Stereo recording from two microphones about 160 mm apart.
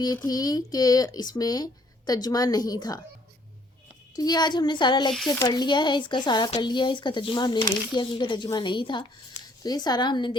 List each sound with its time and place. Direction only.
0.3 s speech: 25° left (ahead or behind)
4.1 s speech: 25° left (ahead or behind)